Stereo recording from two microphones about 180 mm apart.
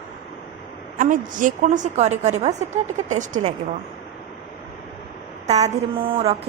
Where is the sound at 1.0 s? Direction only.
45° right (ahead or behind).